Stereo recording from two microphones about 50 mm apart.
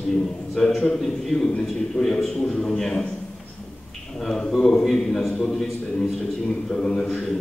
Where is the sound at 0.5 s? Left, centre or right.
Centre.